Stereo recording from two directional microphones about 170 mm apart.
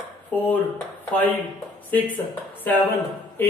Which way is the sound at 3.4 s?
10° left (ahead or behind).